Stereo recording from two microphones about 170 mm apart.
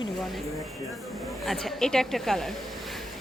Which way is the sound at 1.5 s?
Centre (ahead or behind).